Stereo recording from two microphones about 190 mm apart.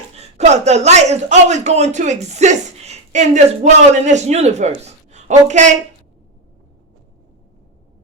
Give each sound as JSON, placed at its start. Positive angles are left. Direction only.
{"t": 0.2, "sound": "speech", "side_deg": -35}